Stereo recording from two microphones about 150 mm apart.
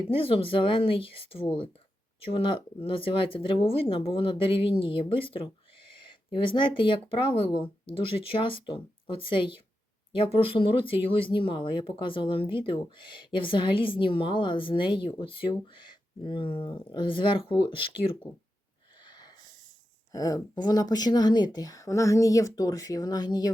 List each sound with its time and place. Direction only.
0.0 s speech: 40° left (ahead or behind)
20.1 s speech: 25° left (ahead or behind)